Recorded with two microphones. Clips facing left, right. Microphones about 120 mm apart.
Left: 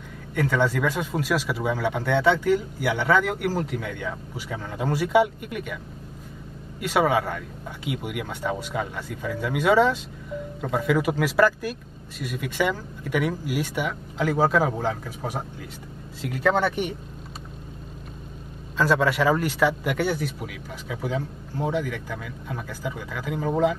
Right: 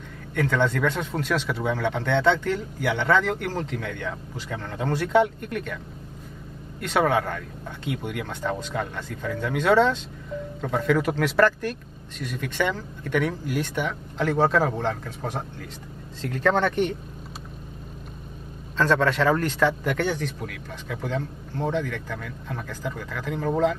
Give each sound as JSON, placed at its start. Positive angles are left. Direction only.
{"t": 0.3, "sound": "speech", "side_deg": 5}
{"t": 6.8, "sound": "speech", "side_deg": 5}
{"t": 18.8, "sound": "speech", "side_deg": 10}